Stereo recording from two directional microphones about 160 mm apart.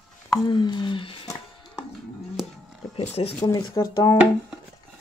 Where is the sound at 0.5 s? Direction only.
30° left (ahead or behind).